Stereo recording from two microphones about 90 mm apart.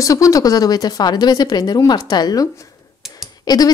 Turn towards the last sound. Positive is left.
turn(degrees=45)  # may be behind; listen again after turning